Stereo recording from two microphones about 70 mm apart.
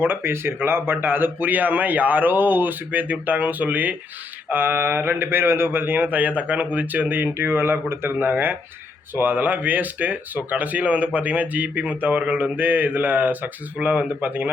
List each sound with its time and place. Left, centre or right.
0.0 s speech: right